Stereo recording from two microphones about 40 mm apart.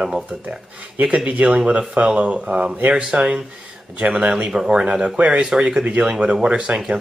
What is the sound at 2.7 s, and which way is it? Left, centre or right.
Speech, right.